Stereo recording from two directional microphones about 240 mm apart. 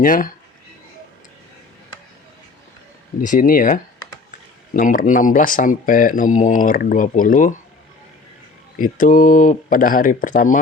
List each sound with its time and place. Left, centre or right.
0.0 s speech: left
3.2 s speech: left
8.8 s speech: left